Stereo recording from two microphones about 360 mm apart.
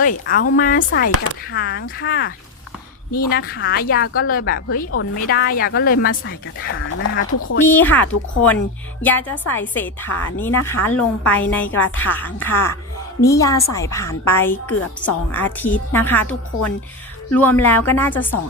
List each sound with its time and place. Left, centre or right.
0.0 s a woman's voice: left
7.6 s a woman's voice: centre
17.3 s a woman's voice: centre